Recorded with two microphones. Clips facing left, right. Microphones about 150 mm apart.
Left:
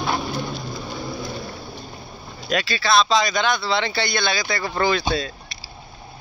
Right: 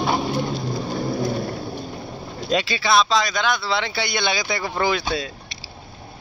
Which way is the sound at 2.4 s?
20° right (ahead or behind).